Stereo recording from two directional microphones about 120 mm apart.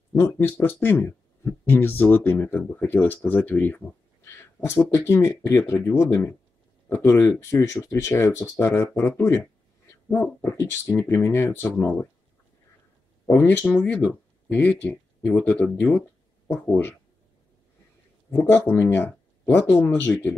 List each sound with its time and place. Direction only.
0.1 s speech: 20° left (ahead or behind)
13.3 s speech: 15° left (ahead or behind)
18.3 s speech: 20° left (ahead or behind)